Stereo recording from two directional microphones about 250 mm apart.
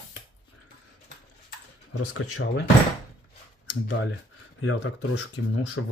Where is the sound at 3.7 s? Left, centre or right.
Left.